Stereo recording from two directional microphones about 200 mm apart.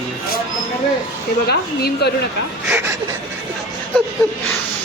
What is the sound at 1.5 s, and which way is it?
Speech, 50° left (ahead or behind).